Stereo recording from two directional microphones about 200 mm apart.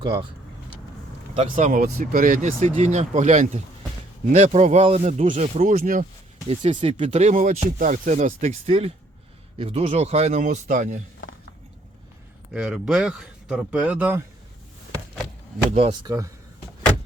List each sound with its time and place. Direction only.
1.4 s speech: 35° right (ahead or behind)
6.5 s speech: 25° right (ahead or behind)
12.5 s a man's voice: 5° right (ahead or behind)
15.7 s speech: 30° right (ahead or behind)
16.0 s speech: 15° right (ahead or behind)